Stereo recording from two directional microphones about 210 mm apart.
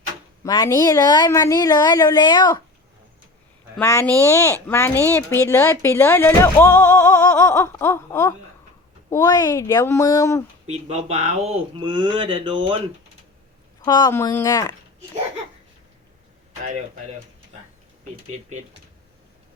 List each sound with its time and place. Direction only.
0.4 s speech: 15° left (ahead or behind)
3.8 s speech: 10° left (ahead or behind)
10.7 s speech: 30° right (ahead or behind)
13.8 s speech: 15° left (ahead or behind)
18.3 s speech: 35° right (ahead or behind)